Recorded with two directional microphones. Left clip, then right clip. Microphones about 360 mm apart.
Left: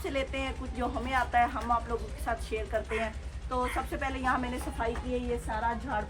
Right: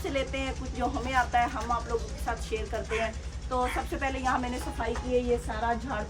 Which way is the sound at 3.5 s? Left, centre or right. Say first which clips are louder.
Right 2 dB; centre.